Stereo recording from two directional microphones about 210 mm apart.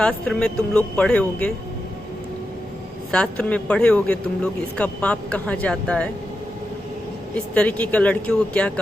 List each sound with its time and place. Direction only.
0.0 s speech: 5° left (ahead or behind)
3.1 s speech: 5° left (ahead or behind)
7.3 s speech: 5° left (ahead or behind)